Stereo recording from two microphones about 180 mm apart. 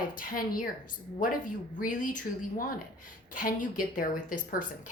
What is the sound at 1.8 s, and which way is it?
Speech, 45° left (ahead or behind).